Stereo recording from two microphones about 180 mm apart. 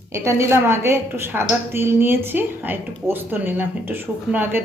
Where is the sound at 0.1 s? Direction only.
15° right (ahead or behind).